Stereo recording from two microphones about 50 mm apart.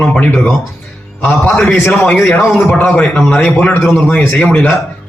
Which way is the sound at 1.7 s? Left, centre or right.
Left.